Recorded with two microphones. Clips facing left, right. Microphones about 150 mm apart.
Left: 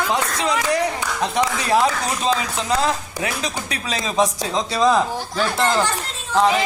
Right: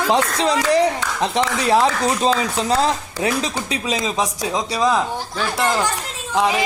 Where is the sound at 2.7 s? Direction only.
30° right (ahead or behind).